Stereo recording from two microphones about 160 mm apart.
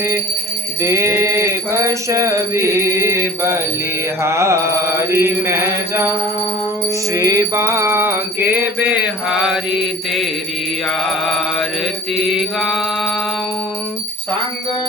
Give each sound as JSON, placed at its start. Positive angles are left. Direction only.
{"t": 0.8, "sound": "music", "side_deg": -15}
{"t": 10.8, "sound": "mantra", "side_deg": 0}